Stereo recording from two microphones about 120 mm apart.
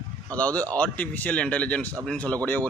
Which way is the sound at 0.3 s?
10° left (ahead or behind).